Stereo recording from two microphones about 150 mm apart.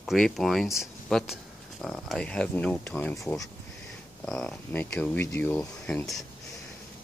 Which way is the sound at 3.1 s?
20° left (ahead or behind).